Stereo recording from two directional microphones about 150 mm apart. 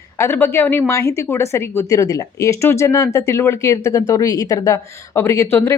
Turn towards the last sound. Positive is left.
turn(degrees=15)  # may be behind; listen again after turning